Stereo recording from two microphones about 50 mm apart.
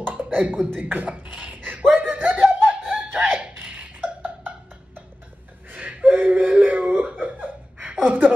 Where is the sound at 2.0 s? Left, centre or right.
Right.